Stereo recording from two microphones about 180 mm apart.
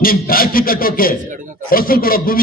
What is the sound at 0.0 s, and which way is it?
Music, 55° left (ahead or behind).